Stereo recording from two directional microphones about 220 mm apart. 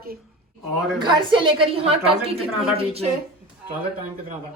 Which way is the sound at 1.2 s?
20° right (ahead or behind).